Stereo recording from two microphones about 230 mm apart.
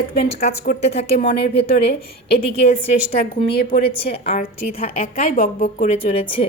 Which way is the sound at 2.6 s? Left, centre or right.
Left.